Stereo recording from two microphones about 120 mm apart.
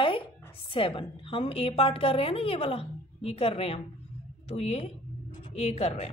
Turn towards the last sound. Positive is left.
turn(degrees=65)  # may be behind; listen again after turning